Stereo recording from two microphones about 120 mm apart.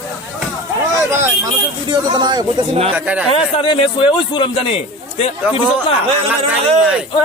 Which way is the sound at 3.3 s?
45° left (ahead or behind).